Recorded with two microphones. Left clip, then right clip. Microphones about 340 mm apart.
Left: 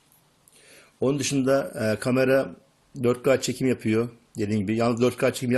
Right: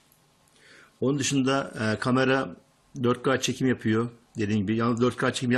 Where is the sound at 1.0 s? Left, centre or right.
Centre.